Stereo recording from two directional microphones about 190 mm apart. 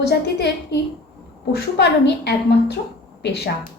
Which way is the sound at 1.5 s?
60° left (ahead or behind).